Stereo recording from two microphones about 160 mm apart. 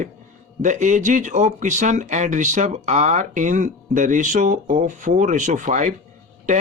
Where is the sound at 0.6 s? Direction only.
50° right (ahead or behind).